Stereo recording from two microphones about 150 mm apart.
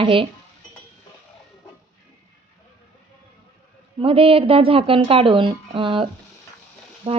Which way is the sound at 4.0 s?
35° right (ahead or behind).